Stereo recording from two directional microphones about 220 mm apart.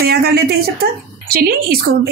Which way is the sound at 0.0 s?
45° right (ahead or behind).